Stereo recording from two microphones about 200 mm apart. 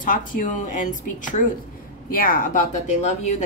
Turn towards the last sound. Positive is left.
turn(degrees=35)  # may be behind; listen again after turning